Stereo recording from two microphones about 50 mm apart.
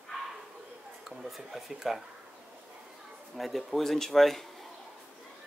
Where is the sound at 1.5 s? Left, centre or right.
Centre.